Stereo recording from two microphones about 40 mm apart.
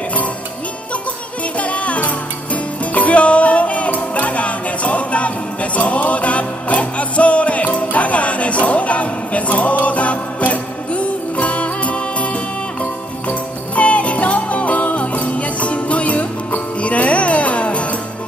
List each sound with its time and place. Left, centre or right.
1.6 s music: left